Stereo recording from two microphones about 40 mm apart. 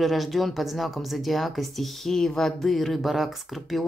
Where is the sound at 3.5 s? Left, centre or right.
Centre.